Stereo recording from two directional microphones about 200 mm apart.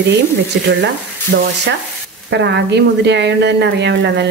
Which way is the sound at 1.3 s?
55° right (ahead or behind).